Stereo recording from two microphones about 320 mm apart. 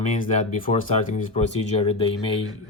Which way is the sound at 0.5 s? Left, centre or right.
Left.